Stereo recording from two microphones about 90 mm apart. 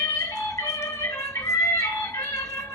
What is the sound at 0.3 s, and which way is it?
Music, 35° left (ahead or behind).